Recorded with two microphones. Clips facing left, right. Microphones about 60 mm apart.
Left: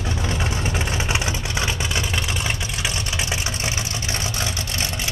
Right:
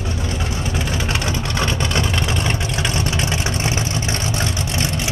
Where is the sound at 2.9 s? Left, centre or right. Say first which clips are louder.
Right 6 dB; right.